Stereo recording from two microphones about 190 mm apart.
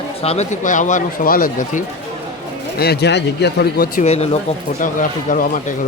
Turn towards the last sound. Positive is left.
turn(degrees=45)  # may be behind; listen again after turning